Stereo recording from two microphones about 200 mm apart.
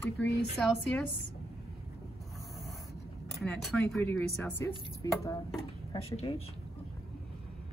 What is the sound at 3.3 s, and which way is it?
Speech, 5° left (ahead or behind).